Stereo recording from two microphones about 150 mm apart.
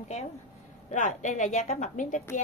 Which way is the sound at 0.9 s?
55° left (ahead or behind).